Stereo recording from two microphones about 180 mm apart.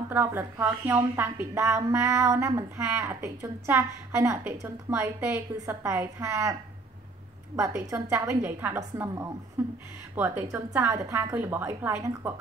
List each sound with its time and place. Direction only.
0.1 s a woman's voice: 10° right (ahead or behind)
7.5 s a woman's voice: 15° right (ahead or behind)